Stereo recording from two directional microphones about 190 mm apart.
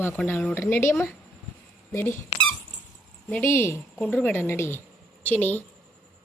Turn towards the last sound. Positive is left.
turn(degrees=10)  # may be behind; listen again after turning